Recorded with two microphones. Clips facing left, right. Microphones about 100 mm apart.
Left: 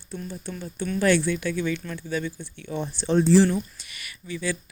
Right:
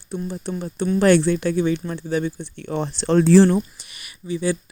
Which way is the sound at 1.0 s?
65° right (ahead or behind).